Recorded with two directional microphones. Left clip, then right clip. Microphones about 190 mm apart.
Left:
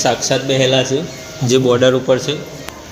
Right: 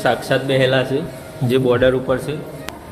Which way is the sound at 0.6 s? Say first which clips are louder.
Left 2 dB; 35° left (ahead or behind).